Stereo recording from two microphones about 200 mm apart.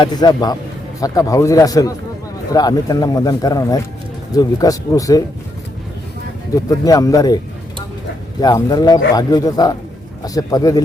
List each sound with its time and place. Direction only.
0.0 s speech: 20° left (ahead or behind)
6.7 s speech: 15° left (ahead or behind)
8.4 s speech: 20° left (ahead or behind)